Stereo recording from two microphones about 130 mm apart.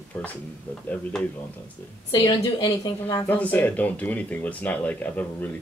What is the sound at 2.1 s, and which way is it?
A woman's voice, 30° left (ahead or behind).